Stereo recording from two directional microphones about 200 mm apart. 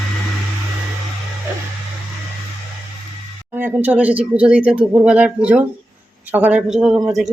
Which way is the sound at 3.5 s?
10° right (ahead or behind).